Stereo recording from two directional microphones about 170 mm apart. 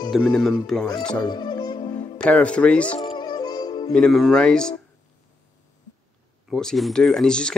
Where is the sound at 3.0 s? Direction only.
25° left (ahead or behind).